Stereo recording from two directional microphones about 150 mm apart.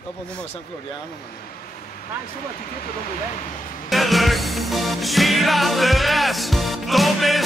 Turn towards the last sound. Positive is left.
turn(degrees=0)  # may be behind; listen again after turning